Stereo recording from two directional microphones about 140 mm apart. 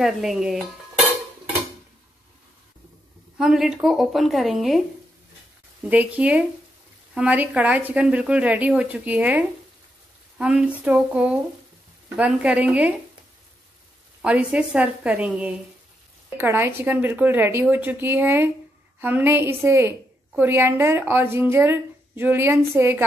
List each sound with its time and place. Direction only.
0.0 s speech: centre (ahead or behind)
3.3 s speech: 5° right (ahead or behind)
5.9 s speech: 10° right (ahead or behind)
14.2 s speech: 10° right (ahead or behind)